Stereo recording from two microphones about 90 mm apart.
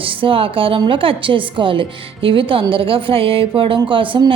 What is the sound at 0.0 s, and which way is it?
A woman's voice, 75° right (ahead or behind).